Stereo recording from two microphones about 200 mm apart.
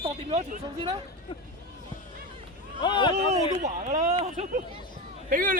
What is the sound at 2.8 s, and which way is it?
Speech, 25° left (ahead or behind).